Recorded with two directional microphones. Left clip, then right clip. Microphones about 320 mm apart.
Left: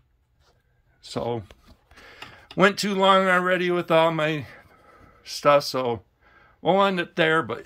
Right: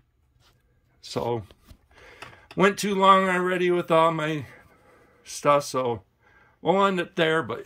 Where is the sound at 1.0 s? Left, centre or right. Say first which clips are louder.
Right 1 dB; centre.